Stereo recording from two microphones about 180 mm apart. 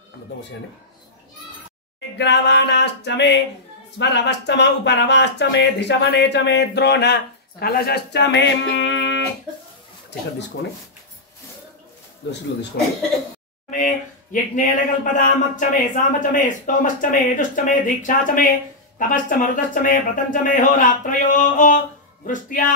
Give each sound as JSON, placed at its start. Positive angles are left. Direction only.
{"t": 2.1, "sound": "speech", "side_deg": 75}
{"t": 13.7, "sound": "speech", "side_deg": 45}